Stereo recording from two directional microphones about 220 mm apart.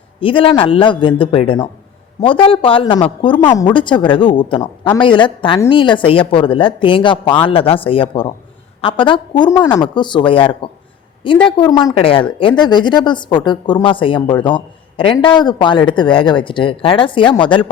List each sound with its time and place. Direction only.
0.2 s speech: 25° left (ahead or behind)